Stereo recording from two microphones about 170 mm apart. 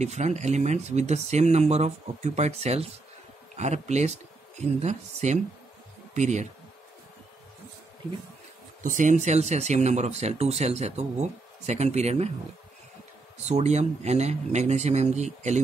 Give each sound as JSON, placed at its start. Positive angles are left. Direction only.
{"t": 0.0, "sound": "speech", "side_deg": -40}
{"t": 8.8, "sound": "speech", "side_deg": -50}
{"t": 13.5, "sound": "speech", "side_deg": -40}